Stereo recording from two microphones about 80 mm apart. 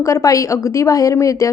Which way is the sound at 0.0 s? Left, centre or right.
Left.